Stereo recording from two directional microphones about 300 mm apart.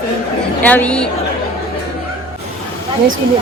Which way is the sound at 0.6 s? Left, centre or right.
Centre.